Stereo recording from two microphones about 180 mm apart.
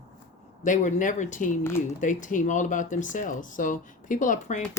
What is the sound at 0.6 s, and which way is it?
Speech, 45° left (ahead or behind).